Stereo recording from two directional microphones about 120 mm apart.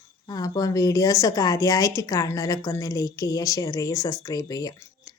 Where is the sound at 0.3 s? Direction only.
30° left (ahead or behind).